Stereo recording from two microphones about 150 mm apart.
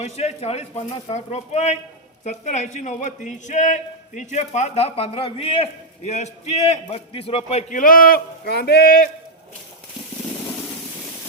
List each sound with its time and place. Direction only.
0.0 s a man's voice: 45° left (ahead or behind)
6.1 s a man's voice: 50° left (ahead or behind)
6.9 s a man's voice: 40° left (ahead or behind)
7.7 s speech: 65° left (ahead or behind); by 9.0 s 80° left